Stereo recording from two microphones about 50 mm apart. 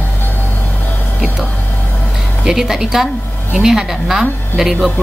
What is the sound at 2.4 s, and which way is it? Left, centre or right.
A woman's voice, centre.